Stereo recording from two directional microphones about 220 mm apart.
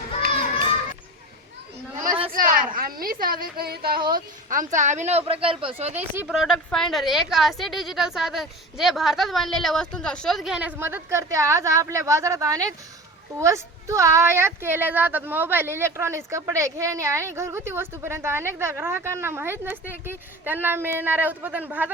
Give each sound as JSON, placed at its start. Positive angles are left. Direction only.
{"t": 2.3, "sound": "a sound", "side_deg": -40}
{"t": 4.1, "sound": "speech", "side_deg": -35}
{"t": 5.9, "sound": "a woman's voice", "side_deg": -10}